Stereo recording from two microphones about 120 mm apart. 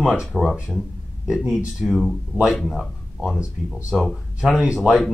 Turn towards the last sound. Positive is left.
turn(degrees=0)  # may be behind; listen again after turning